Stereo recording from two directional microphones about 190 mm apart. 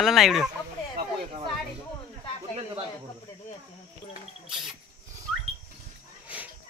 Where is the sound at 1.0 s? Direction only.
55° right (ahead or behind).